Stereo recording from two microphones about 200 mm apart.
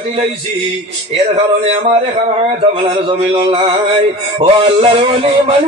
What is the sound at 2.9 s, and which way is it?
Speech, 25° right (ahead or behind).